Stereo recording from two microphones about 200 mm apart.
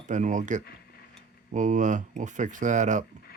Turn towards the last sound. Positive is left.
turn(degrees=-35)  # may be behind; listen again after turning